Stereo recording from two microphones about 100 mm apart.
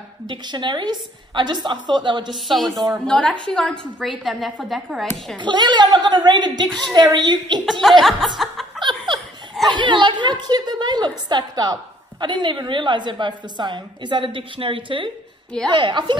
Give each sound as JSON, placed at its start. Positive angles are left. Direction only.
{"t": 0.3, "sound": "a woman's voice", "side_deg": -50}
{"t": 2.3, "sound": "a woman's voice", "side_deg": 0}
{"t": 2.7, "sound": "a woman's voice", "side_deg": -35}
{"t": 3.1, "sound": "a woman's voice", "side_deg": 10}
{"t": 5.4, "sound": "a woman's voice", "side_deg": -50}
{"t": 7.8, "sound": "a woman's voice", "side_deg": 0}
{"t": 8.4, "sound": "chuckle", "side_deg": 0}
{"t": 8.8, "sound": "laughter", "side_deg": -50}
{"t": 9.7, "sound": "chuckle", "side_deg": -50}
{"t": 11.2, "sound": "a woman's voice", "side_deg": -45}
{"t": 15.7, "sound": "a woman's voice", "side_deg": -50}